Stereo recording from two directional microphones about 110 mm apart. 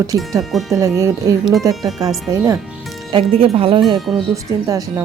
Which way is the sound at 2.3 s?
30° right (ahead or behind).